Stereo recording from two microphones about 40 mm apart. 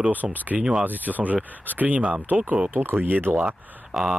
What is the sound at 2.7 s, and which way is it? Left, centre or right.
Speech, right.